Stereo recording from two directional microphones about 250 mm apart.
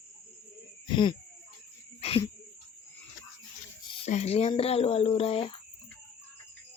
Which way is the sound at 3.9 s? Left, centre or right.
Left.